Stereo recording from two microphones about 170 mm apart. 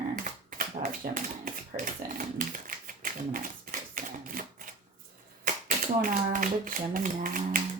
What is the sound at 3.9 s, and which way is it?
Typewriter, 55° right (ahead or behind).